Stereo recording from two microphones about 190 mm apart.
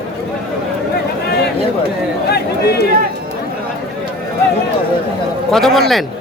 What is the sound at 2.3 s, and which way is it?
Chatter, 55° left (ahead or behind).